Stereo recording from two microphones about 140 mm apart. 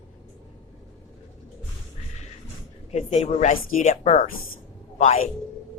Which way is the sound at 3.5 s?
75° left (ahead or behind).